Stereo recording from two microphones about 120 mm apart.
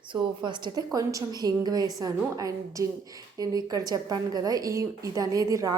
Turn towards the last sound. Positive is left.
turn(degrees=-30)  # may be behind; listen again after turning